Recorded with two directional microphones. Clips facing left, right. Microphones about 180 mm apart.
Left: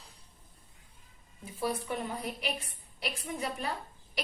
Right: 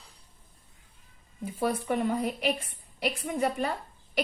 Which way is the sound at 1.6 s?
55° right (ahead or behind).